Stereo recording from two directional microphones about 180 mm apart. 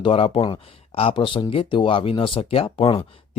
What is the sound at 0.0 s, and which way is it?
Speech, 30° left (ahead or behind).